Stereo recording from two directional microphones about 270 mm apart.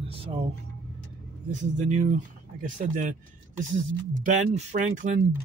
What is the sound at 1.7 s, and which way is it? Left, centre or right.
Speech, right.